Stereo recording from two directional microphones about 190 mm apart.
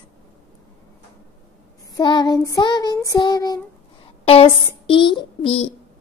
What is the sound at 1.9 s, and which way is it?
A child's voice, 20° left (ahead or behind).